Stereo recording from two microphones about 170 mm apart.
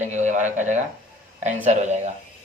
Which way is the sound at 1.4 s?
45° right (ahead or behind).